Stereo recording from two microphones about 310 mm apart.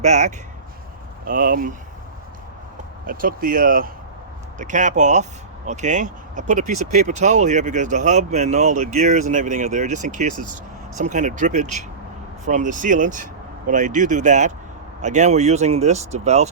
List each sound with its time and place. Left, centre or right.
0.0 s speech: right
3.1 s speech: right